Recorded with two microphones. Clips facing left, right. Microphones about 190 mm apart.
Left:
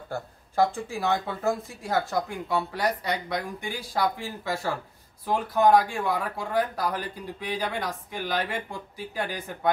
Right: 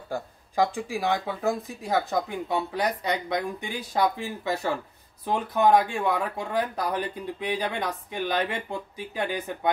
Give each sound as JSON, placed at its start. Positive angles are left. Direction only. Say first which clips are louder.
{"t": 0.1, "sound": "speech", "louder": "right 1 dB", "side_deg": -15}